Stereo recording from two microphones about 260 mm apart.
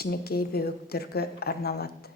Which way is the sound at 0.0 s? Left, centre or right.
Left.